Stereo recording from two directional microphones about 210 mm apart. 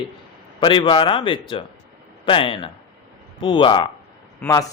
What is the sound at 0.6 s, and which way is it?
A man's voice, 25° left (ahead or behind).